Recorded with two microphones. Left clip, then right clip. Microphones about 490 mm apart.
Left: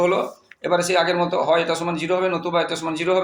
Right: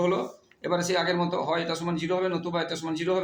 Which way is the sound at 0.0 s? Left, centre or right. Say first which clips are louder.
Left 7 dB; right.